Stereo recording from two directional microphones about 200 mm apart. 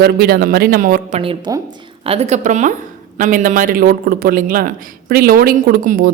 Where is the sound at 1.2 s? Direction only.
25° right (ahead or behind).